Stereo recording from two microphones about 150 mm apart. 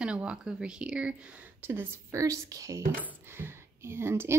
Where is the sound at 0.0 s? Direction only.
5° right (ahead or behind).